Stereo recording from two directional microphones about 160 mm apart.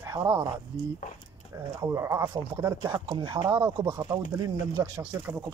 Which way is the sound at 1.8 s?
20° right (ahead or behind).